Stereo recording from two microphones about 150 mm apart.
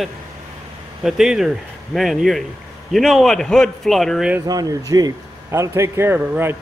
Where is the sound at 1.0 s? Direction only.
5° right (ahead or behind).